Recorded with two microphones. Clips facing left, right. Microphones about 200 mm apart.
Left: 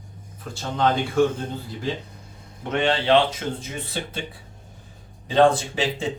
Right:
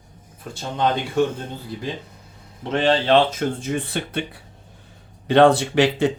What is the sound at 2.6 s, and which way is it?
Speech, 35° right (ahead or behind).